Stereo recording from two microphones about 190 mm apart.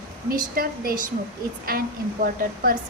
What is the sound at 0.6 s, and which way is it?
A woman's voice, 50° right (ahead or behind).